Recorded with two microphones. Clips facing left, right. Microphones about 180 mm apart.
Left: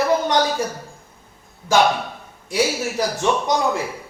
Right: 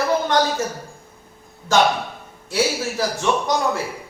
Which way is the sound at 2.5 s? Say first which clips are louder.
Left 1 dB; 15° left (ahead or behind).